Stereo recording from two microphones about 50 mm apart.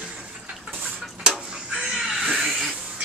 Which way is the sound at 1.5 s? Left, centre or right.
Centre.